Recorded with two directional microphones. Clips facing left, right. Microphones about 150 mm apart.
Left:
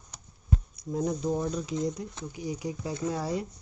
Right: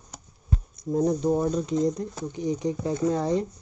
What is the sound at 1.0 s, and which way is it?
Speech, 30° right (ahead or behind).